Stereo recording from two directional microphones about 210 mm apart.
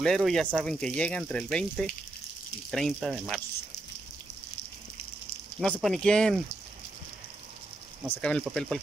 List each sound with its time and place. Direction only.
0.0 s speech: centre (ahead or behind)
5.6 s speech: centre (ahead or behind)
8.2 s speech: 5° left (ahead or behind)